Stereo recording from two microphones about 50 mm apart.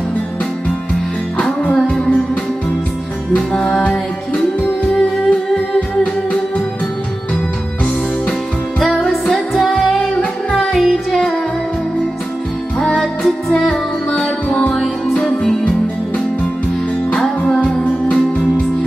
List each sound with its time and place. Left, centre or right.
1.9 s music: centre
3.3 s music: centre
5.3 s music: left
8.7 s music: centre
12.7 s music: centre
14.7 s music: centre
17.4 s music: left